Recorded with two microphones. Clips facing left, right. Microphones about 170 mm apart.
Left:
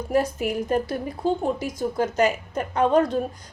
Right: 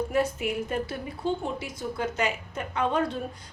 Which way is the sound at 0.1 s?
40° left (ahead or behind).